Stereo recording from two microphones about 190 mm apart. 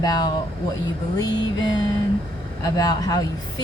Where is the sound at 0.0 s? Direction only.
20° left (ahead or behind).